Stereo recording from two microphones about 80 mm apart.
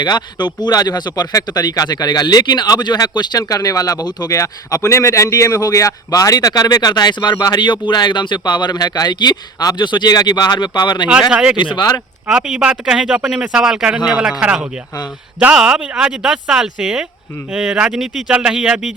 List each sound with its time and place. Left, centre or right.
0.0 s speech: left
4.4 s a man's voice: left
7.7 s speech: left
11.3 s a man's voice: centre
11.5 s speech: left
12.3 s a man's voice: centre